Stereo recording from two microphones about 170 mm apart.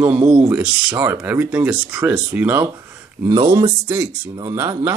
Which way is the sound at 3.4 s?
30° right (ahead or behind).